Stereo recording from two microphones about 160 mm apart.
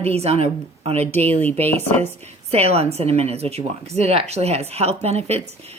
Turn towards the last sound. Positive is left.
turn(degrees=-40)  # may be behind; listen again after turning